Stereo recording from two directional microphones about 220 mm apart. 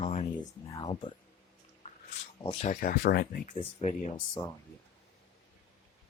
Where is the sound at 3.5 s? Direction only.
25° left (ahead or behind).